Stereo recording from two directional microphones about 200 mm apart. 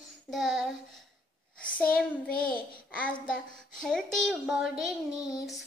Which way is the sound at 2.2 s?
45° left (ahead or behind).